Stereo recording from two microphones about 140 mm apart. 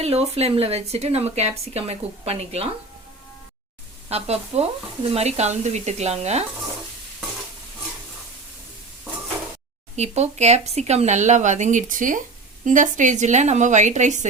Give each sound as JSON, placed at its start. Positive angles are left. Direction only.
{"t": 0.0, "sound": "speech", "side_deg": -45}
{"t": 4.1, "sound": "speech", "side_deg": -45}
{"t": 9.9, "sound": "speech", "side_deg": -50}